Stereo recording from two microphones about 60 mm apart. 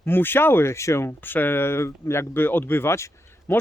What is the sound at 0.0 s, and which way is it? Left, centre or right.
Speech, left.